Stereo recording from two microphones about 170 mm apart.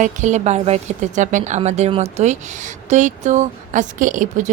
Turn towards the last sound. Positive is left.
turn(degrees=-50)  # may be behind; listen again after turning